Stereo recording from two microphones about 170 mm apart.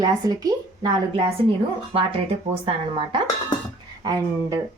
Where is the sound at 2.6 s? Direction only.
30° right (ahead or behind).